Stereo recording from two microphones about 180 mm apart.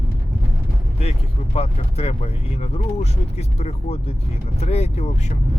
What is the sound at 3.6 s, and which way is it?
Speech, 35° left (ahead or behind).